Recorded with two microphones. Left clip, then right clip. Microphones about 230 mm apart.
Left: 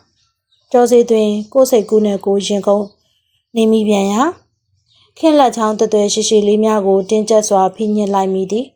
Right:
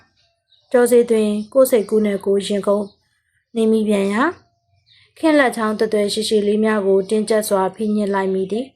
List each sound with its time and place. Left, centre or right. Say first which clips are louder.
0.7 s a woman's voice: left 4 dB; left